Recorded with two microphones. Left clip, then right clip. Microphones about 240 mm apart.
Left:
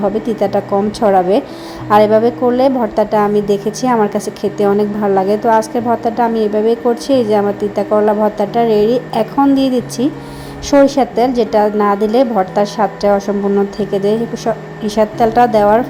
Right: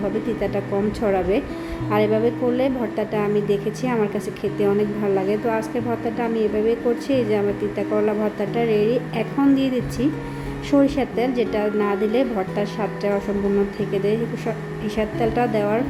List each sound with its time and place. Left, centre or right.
0.3 s a woman's voice: left